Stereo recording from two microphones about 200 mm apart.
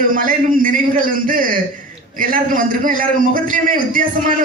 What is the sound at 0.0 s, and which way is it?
A man's voice, 45° right (ahead or behind).